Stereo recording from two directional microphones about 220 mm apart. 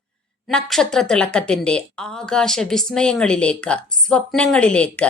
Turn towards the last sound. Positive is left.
turn(degrees=5)  # may be behind; listen again after turning